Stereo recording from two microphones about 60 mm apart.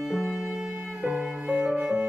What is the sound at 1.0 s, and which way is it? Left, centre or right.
Music, centre.